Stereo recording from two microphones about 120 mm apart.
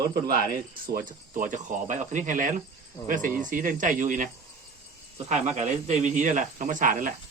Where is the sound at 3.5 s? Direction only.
90° right.